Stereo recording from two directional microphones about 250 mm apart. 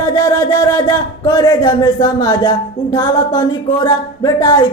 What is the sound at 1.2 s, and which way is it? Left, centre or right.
Speech, centre.